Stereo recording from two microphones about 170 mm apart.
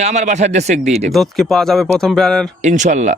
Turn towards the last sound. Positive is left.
turn(degrees=-45)  # may be behind; listen again after turning